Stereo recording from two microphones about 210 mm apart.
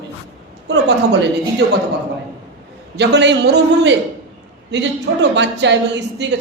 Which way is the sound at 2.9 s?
55° right (ahead or behind).